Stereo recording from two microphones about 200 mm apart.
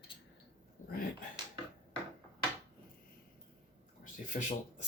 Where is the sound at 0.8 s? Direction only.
40° left (ahead or behind).